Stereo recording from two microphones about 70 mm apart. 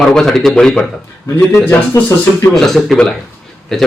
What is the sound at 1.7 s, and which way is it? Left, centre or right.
Speech, left.